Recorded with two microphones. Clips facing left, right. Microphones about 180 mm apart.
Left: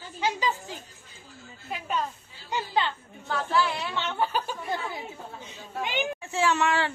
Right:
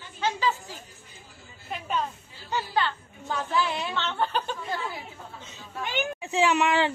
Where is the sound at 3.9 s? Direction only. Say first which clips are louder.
Left 1 dB; 10° left (ahead or behind).